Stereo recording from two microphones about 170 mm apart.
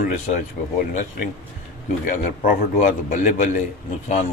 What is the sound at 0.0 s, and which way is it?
Speech, 50° left (ahead or behind).